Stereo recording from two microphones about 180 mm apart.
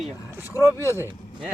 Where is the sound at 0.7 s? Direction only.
15° left (ahead or behind).